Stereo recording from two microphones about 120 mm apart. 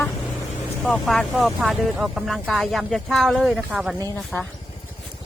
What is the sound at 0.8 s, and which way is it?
Speech, 5° left (ahead or behind).